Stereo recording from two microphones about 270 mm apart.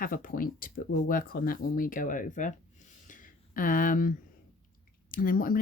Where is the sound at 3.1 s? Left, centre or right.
Left.